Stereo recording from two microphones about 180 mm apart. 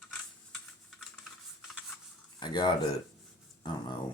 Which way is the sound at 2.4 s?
25° left (ahead or behind).